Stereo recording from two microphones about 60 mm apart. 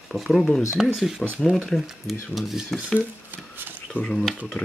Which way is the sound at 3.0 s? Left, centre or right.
Right.